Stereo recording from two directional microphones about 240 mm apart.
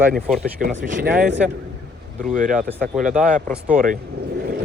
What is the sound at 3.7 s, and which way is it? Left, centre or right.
Speech, right.